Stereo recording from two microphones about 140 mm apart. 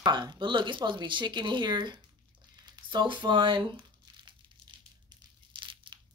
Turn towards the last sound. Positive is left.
turn(degrees=-35)  # may be behind; listen again after turning